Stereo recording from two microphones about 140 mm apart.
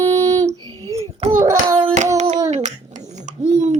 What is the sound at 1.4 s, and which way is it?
Hands, 25° right (ahead or behind).